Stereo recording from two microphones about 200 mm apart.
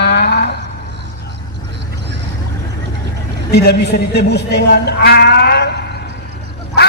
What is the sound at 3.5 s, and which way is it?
Speech, 55° left (ahead or behind).